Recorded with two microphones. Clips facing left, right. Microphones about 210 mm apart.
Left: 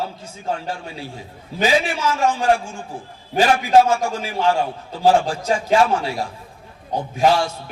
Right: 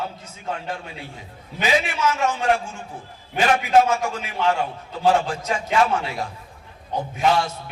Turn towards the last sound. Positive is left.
turn(degrees=30)  # may be behind; listen again after turning